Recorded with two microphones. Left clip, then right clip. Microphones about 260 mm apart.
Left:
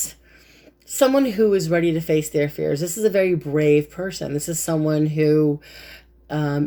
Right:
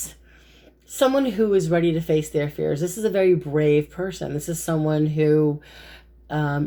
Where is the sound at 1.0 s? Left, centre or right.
Left.